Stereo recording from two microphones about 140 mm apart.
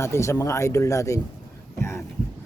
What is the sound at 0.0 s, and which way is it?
A man's voice, 20° left (ahead or behind).